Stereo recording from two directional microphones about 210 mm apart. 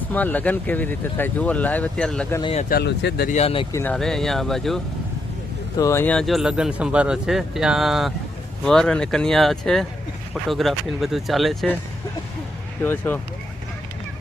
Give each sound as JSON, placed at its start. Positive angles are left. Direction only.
{"t": 0.1, "sound": "speech", "side_deg": 10}
{"t": 2.4, "sound": "speech", "side_deg": 30}
{"t": 2.6, "sound": "speech", "side_deg": 50}
{"t": 3.2, "sound": "speech", "side_deg": 30}
{"t": 3.7, "sound": "speech", "side_deg": 10}
{"t": 5.8, "sound": "speech", "side_deg": 10}
{"t": 12.8, "sound": "speech", "side_deg": 10}